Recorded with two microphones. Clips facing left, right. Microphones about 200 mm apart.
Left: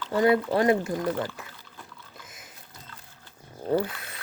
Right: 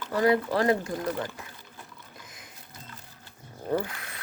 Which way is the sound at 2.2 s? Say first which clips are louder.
Even; 25° left (ahead or behind).